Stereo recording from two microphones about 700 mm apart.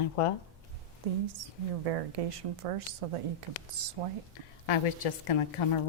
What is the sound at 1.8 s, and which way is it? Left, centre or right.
A woman's voice, right.